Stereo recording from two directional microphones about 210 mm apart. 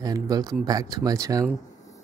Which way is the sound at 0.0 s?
15° right (ahead or behind).